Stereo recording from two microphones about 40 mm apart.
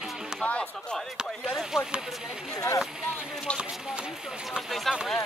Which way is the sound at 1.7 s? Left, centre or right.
Centre.